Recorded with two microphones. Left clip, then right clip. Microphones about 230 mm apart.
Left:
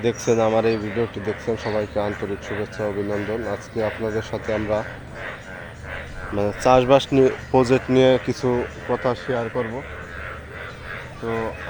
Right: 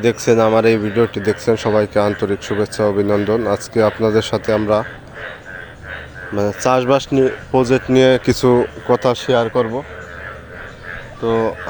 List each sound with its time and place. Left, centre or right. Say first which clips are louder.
0.0 s speech: right 6 dB; right
6.3 s speech: right 1 dB; centre
7.1 s speech: right 2 dB; centre; by 9.8 s right
11.3 s speech: right 9 dB; right